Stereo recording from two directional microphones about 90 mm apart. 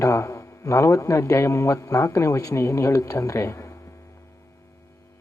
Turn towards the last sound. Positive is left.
turn(degrees=35)  # may be behind; listen again after turning